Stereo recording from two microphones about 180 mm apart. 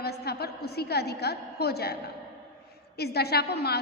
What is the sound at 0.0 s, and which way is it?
A woman's voice, 65° left (ahead or behind).